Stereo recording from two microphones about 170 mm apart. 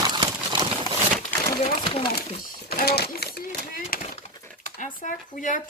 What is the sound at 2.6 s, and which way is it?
Sewing machine, 70° left (ahead or behind).